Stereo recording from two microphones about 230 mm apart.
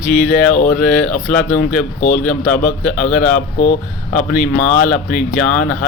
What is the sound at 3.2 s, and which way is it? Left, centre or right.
Speech, left.